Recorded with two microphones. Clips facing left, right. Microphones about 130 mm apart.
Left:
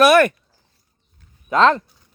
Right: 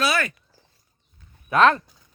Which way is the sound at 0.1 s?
65° left (ahead or behind).